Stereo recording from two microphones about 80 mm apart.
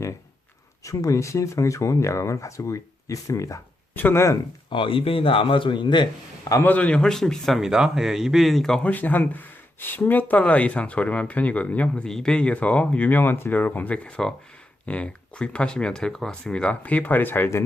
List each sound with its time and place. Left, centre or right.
0.9 s speech: left
3.9 s speech: left
4.7 s a man's voice: left
6.7 s speech: centre
7.6 s speech: centre
8.8 s speech: left